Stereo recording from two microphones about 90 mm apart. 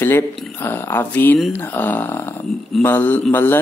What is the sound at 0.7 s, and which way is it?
Speech, 25° left (ahead or behind).